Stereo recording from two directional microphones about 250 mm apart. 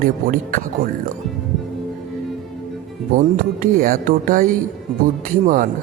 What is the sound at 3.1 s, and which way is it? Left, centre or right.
A man's voice, right.